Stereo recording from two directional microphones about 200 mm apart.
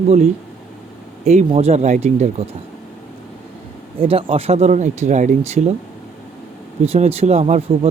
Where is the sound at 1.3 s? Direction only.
30° right (ahead or behind).